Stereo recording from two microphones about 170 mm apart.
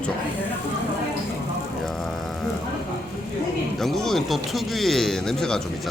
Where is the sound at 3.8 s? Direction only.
Centre (ahead or behind).